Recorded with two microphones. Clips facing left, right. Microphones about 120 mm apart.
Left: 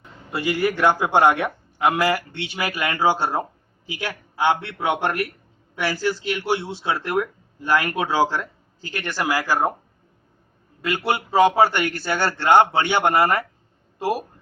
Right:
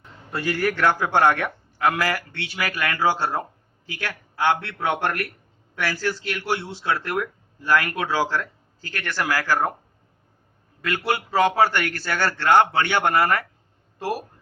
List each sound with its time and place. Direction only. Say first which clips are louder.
0.3 s a man's voice: left 2 dB; 10° left (ahead or behind)
10.8 s speech: left 2 dB; 20° left (ahead or behind)